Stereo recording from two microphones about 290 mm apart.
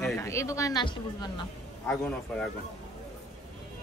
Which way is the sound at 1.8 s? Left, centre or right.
Centre.